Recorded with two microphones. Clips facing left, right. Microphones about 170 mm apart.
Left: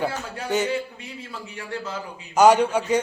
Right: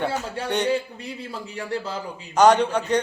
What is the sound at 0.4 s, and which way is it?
Speech, 5° left (ahead or behind).